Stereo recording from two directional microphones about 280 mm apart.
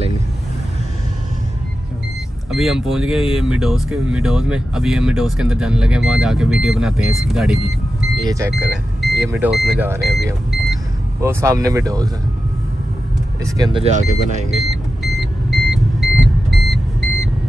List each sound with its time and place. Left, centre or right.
2.5 s speech: centre
10.5 s vehicle: centre
13.6 s speech: centre
14.5 s vehicle: centre